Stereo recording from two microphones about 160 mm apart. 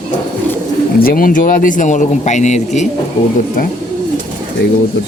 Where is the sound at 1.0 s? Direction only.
65° left (ahead or behind); by 2.9 s 45° left (ahead or behind).